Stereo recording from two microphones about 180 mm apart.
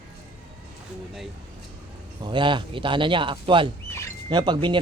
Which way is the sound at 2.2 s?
25° right (ahead or behind).